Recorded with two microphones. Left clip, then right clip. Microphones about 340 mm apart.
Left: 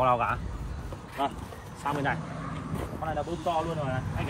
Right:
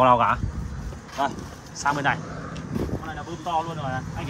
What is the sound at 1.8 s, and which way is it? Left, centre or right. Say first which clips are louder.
Speech: right 7 dB; centre.